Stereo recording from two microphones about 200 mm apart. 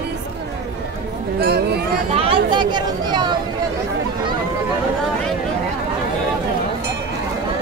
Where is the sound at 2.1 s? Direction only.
25° right (ahead or behind).